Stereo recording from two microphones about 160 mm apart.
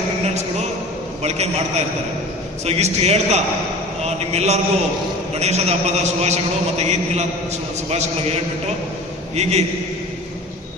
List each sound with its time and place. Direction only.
1.2 s a man's voice: 45° right (ahead or behind)
4.0 s a sound: 45° right (ahead or behind)
5.4 s a man's voice: 45° right (ahead or behind)
9.3 s a man's voice: 45° right (ahead or behind)